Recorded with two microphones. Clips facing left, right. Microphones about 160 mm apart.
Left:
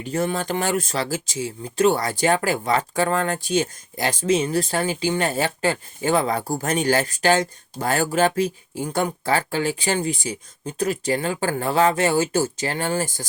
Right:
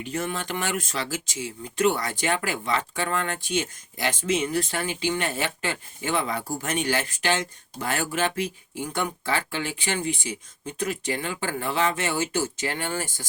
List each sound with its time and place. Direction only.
0.0 s speech: 35° left (ahead or behind)